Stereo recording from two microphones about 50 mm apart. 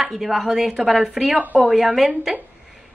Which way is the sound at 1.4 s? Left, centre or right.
Right.